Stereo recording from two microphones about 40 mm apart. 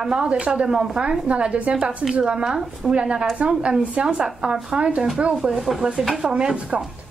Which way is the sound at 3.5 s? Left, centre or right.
Right.